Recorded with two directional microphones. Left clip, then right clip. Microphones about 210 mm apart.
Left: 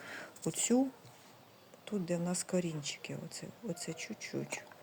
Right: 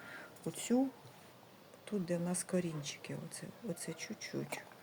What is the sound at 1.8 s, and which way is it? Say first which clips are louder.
Speech: left 1 dB; 20° left (ahead or behind).